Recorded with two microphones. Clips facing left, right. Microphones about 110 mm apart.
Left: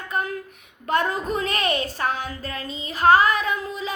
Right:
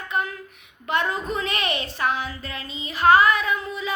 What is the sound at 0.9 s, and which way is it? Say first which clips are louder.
Child singing: left 2 dB; 40° left (ahead or behind).